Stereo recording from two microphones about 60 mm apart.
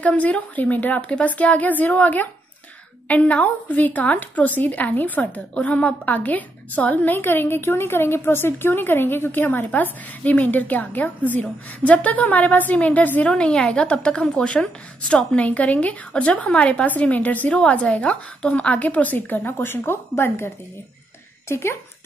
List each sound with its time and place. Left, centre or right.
0.0 s a woman's voice: left
13.3 s a woman's voice: centre; by 21.7 s left